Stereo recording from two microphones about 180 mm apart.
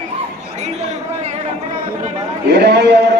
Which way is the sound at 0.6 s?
40° right (ahead or behind).